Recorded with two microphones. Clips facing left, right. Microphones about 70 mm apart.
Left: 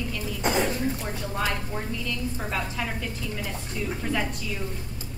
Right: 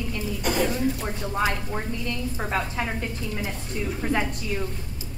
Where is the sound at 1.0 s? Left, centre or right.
Centre.